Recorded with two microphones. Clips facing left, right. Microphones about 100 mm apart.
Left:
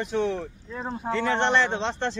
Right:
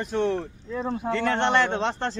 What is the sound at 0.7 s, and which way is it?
Speech, 75° right (ahead or behind).